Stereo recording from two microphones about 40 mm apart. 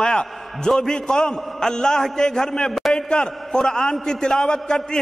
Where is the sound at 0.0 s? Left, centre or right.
Centre.